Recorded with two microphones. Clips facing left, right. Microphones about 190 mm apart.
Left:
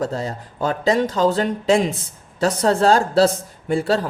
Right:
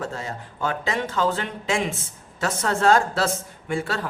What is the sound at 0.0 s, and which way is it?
A woman's voice, 35° left (ahead or behind).